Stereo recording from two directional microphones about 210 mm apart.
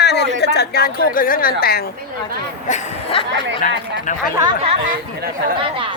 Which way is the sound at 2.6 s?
30° left (ahead or behind).